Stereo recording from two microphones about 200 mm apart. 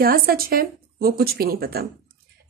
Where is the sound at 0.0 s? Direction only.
45° right (ahead or behind).